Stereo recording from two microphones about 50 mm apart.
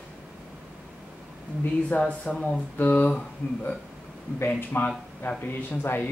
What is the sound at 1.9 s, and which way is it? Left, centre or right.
Speech, left.